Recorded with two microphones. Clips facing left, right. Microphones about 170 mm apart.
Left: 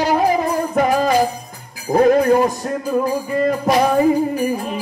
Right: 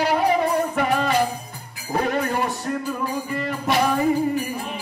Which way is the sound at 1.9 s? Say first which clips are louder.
Left 10 dB; 40° left (ahead or behind).